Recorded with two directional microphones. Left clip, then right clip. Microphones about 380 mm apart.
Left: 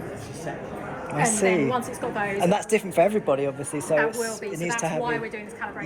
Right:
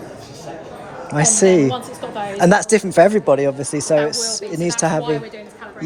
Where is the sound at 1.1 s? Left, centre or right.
Right.